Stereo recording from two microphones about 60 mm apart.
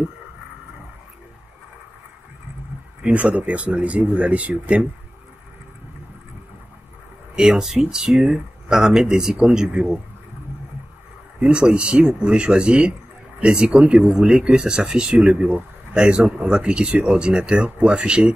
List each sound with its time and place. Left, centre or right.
3.0 s speech: right
7.3 s speech: centre
11.3 s speech: centre